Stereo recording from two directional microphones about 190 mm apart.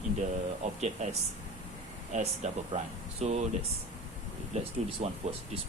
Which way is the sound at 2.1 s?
35° right (ahead or behind).